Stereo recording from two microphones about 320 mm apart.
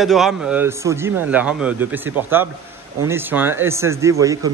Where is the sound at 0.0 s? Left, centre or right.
Centre.